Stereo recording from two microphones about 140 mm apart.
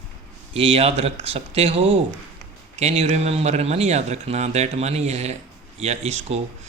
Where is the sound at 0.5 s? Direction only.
45° right (ahead or behind).